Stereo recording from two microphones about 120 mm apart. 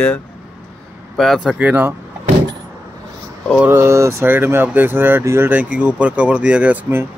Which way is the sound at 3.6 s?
20° right (ahead or behind).